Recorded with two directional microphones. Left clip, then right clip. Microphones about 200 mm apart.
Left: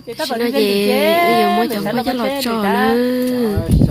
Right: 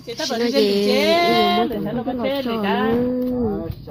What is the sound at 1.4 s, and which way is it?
Speech, 45° left (ahead or behind).